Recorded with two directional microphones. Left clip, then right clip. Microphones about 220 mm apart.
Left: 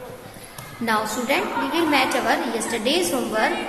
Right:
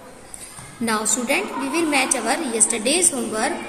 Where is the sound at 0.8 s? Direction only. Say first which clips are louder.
Even; 30° right (ahead or behind).